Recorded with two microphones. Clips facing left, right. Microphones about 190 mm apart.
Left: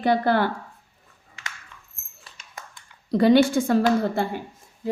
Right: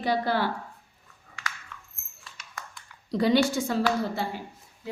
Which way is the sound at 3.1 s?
55° left (ahead or behind).